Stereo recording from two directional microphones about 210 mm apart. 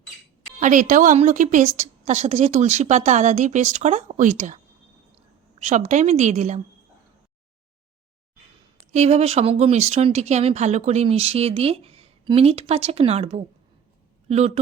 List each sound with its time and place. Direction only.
0.6 s a woman's voice: 40° right (ahead or behind)
8.9 s a woman's voice: 30° right (ahead or behind)